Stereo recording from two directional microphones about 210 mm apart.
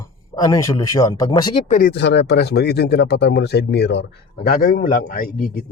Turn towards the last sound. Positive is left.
turn(degrees=45)  # may be behind; listen again after turning